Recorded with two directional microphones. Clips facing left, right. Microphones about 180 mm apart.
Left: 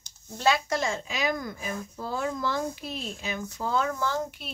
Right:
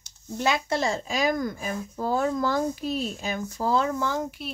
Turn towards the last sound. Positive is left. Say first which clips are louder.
# right 2 dB
turn(degrees=-15)  # may be behind; listen again after turning